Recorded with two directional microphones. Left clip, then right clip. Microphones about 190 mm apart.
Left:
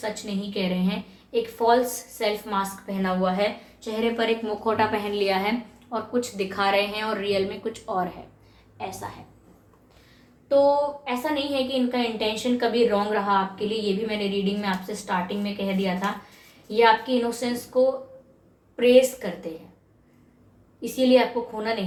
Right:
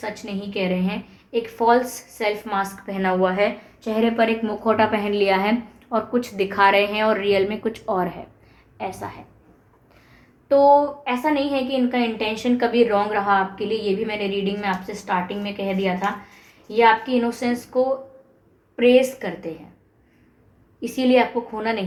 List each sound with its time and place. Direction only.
0.0 s a woman's voice: 30° right (ahead or behind)
3.2 s a woman's voice: 50° right (ahead or behind)
5.9 s a woman's voice: 50° right (ahead or behind)
10.5 s a woman's voice: 50° right (ahead or behind); by 19.5 s 30° right (ahead or behind)
20.8 s a woman's voice: 30° right (ahead or behind)